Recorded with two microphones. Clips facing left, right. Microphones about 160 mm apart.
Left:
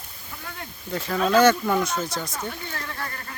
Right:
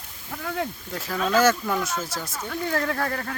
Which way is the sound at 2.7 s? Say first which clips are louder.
Right 9 dB; 75° right (ahead or behind).